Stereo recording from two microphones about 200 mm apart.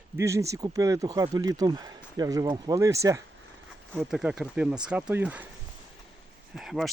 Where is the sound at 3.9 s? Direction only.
Centre (ahead or behind).